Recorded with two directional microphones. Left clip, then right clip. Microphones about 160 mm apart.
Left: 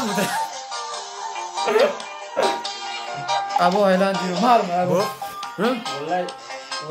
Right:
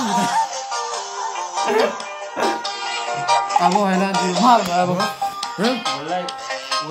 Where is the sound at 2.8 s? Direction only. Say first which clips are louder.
Right 6 dB; 75° right (ahead or behind).